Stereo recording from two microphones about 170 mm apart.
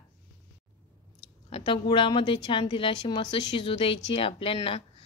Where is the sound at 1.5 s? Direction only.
30° left (ahead or behind).